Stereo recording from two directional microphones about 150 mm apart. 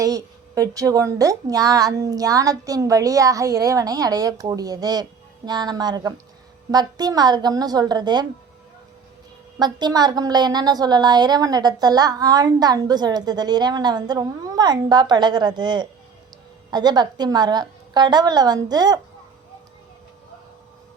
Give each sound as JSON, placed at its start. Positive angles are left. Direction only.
{"t": 0.0, "sound": "a woman's voice", "side_deg": -25}
{"t": 9.6, "sound": "a woman's voice", "side_deg": -30}